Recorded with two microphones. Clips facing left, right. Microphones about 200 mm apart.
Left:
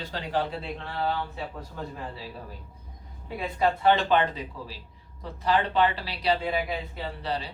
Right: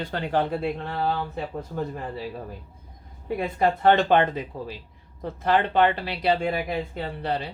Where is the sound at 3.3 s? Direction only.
50° right (ahead or behind).